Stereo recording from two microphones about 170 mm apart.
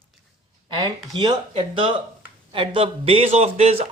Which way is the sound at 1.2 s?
30° right (ahead or behind).